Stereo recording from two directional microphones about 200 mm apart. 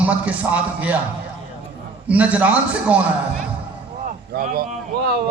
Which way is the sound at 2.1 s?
5° right (ahead or behind).